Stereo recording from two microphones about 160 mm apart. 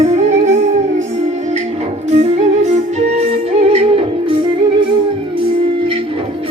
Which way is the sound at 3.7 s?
35° right (ahead or behind).